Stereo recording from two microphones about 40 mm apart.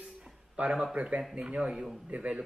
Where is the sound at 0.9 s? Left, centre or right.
Right.